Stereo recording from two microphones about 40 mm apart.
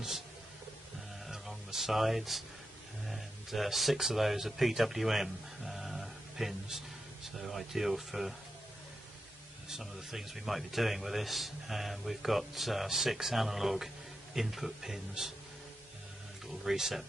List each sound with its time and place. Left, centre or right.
1.3 s a sound: centre
3.1 s speech: centre
9.7 s speech: centre
16.4 s speech: centre